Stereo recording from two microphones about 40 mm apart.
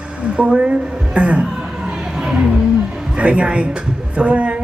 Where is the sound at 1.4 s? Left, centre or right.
Centre.